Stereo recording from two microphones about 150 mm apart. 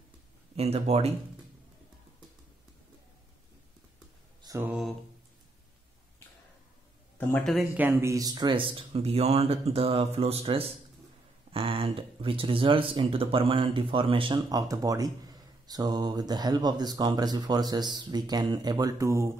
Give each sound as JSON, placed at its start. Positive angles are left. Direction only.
{"t": 0.6, "sound": "speech", "side_deg": -45}
{"t": 4.5, "sound": "mantra", "side_deg": -25}
{"t": 7.2, "sound": "speech", "side_deg": 15}
{"t": 7.7, "sound": "speech", "side_deg": -15}